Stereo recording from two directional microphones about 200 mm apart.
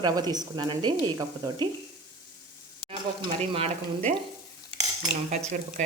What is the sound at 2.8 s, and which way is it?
Speech, 30° right (ahead or behind).